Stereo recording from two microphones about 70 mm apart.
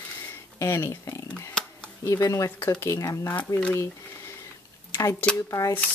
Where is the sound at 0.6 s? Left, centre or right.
Left.